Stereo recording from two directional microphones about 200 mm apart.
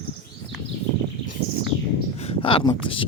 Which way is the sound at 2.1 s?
30° left (ahead or behind).